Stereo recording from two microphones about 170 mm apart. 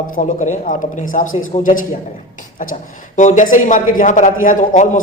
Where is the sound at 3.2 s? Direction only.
50° left (ahead or behind).